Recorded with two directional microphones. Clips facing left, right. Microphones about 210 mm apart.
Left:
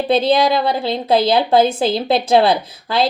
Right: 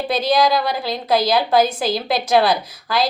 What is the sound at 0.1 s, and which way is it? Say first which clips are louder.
A woman's voice: left 3 dB; 25° left (ahead or behind).